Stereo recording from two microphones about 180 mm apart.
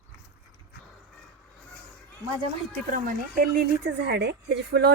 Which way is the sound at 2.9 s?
50° right (ahead or behind).